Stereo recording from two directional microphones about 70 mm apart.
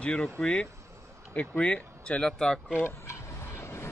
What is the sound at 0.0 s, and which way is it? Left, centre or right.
Speech, centre.